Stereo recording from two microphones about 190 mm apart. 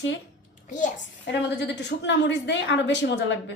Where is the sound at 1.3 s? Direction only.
65° left (ahead or behind).